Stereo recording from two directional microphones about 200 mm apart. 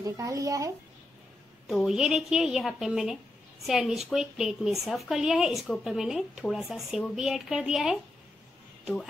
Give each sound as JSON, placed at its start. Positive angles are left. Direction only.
{"t": 0.0, "sound": "a child's voice", "side_deg": -15}
{"t": 1.7, "sound": "a woman's voice", "side_deg": 0}